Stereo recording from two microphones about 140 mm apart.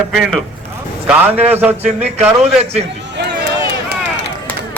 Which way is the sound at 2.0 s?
50° right (ahead or behind).